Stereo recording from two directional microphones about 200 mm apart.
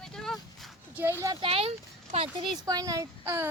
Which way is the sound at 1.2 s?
20° right (ahead or behind).